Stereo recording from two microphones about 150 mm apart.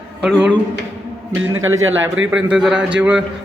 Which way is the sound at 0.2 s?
5° right (ahead or behind).